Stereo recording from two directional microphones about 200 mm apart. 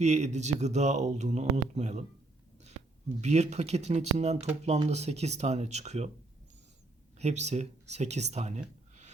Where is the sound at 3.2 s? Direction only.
35° right (ahead or behind).